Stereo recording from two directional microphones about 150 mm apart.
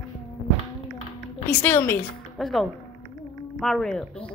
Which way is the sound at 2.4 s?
Centre (ahead or behind).